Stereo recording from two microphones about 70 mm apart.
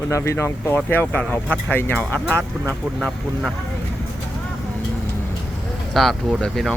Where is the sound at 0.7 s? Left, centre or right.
Left.